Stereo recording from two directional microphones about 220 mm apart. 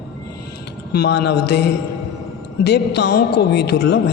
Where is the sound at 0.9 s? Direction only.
45° left (ahead or behind).